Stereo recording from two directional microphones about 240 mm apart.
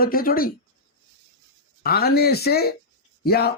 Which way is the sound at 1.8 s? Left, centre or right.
Left.